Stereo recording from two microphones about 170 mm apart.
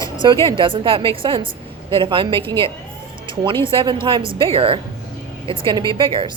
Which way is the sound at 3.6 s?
30° right (ahead or behind).